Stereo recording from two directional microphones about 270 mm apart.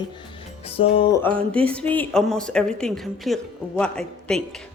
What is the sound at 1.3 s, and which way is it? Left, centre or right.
Speech, centre.